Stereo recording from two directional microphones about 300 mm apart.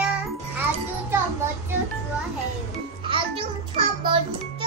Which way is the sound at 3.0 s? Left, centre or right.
Centre.